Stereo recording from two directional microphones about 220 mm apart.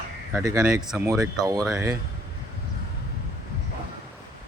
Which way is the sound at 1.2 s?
15° right (ahead or behind).